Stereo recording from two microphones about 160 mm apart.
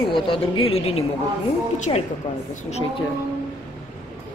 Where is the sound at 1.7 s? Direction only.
50° left (ahead or behind).